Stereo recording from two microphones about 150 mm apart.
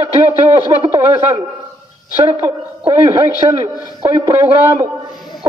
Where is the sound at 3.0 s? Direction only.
20° right (ahead or behind).